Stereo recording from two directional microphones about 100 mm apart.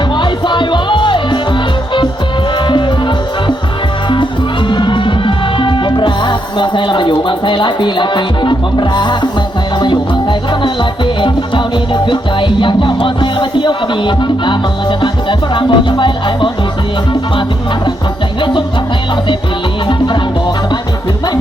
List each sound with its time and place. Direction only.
0.2 s music: 50° left (ahead or behind)
4.7 s music: 50° left (ahead or behind)
12.0 s music: 50° left (ahead or behind)